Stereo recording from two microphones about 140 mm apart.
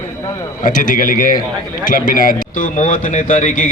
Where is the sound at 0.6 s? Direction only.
70° left (ahead or behind).